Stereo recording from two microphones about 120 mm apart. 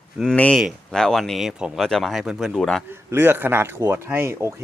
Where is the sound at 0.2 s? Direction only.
10° left (ahead or behind).